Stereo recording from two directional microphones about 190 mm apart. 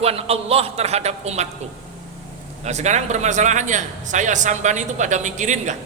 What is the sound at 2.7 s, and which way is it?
A man's voice, 35° right (ahead or behind).